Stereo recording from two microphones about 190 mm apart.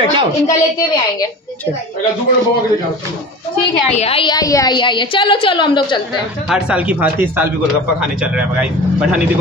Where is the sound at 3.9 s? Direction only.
30° left (ahead or behind).